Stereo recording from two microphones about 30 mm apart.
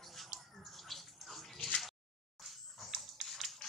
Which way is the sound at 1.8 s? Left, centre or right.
Centre.